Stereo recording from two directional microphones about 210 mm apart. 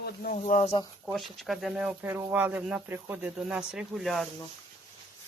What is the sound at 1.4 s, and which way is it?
Speech, centre (ahead or behind).